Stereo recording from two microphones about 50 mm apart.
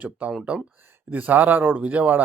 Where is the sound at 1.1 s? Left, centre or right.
Right.